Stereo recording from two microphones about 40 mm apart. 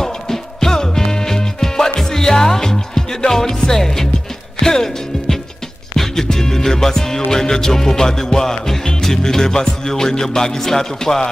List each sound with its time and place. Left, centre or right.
0.0 s music: centre